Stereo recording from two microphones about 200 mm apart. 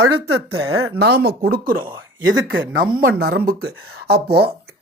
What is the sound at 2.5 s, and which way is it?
Speech, 70° right (ahead or behind).